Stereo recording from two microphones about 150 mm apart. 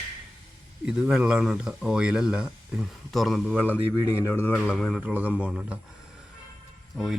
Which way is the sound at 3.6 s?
15° left (ahead or behind).